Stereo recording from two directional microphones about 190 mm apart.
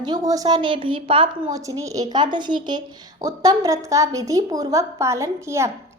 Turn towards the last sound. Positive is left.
turn(degrees=-15)  # may be behind; listen again after turning